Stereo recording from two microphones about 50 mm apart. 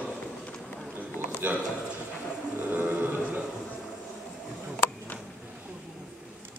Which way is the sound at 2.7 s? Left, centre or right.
Right.